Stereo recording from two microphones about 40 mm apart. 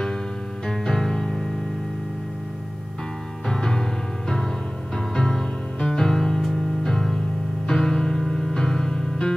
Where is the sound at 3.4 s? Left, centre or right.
Centre.